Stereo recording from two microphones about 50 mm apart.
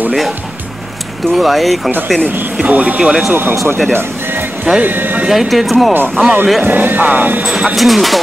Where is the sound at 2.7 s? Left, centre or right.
Right.